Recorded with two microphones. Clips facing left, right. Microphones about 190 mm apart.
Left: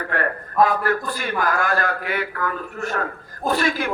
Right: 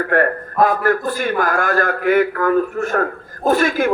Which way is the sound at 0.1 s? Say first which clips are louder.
Right 7 dB; 45° right (ahead or behind).